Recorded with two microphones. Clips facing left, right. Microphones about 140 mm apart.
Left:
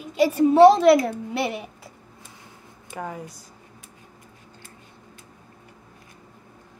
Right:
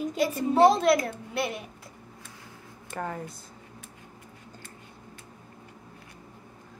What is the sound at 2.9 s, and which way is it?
Speech, 10° left (ahead or behind).